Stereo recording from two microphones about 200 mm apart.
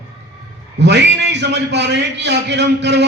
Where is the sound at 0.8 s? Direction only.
60° right (ahead or behind).